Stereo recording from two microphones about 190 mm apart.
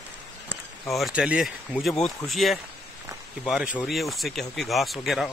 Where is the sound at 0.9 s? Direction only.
Centre (ahead or behind).